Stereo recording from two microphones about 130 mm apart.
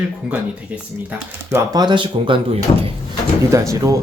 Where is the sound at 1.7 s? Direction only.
35° right (ahead or behind).